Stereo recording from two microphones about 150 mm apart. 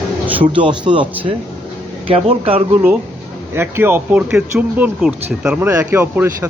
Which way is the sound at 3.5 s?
15° right (ahead or behind).